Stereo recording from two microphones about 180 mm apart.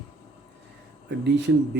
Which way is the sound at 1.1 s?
70° right (ahead or behind).